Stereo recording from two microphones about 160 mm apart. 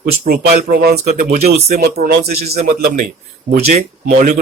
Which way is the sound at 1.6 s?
75° right (ahead or behind).